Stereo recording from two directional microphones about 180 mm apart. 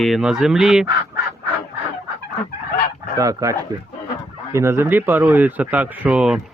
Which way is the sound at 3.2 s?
20° right (ahead or behind).